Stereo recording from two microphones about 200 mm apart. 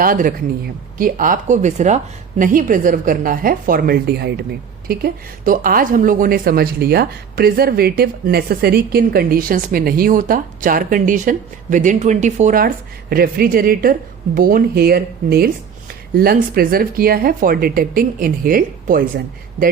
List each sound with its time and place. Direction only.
0.0 s a woman's voice: 45° right (ahead or behind)